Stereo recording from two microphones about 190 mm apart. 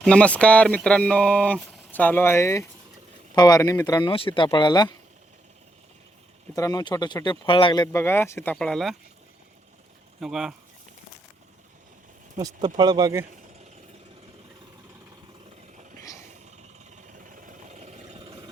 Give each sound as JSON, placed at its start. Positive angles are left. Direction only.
{"t": 0.0, "sound": "speech", "side_deg": 5}
{"t": 6.5, "sound": "speech", "side_deg": 20}
{"t": 10.2, "sound": "speech", "side_deg": 0}
{"t": 12.6, "sound": "speech", "side_deg": -20}
{"t": 16.9, "sound": "vehicle", "side_deg": -45}